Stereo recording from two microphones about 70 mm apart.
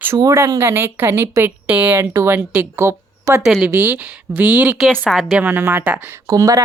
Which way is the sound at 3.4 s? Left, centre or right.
Centre.